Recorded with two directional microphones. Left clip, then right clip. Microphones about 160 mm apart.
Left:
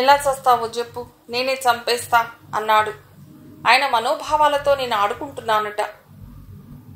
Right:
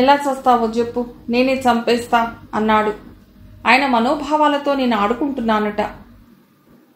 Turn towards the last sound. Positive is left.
turn(degrees=45)  # may be behind; listen again after turning